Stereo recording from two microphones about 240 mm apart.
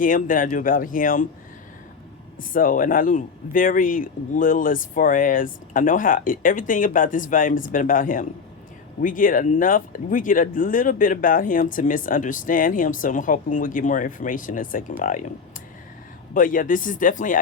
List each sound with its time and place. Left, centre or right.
0.0 s speech: left
2.4 s speech: left
16.3 s speech: left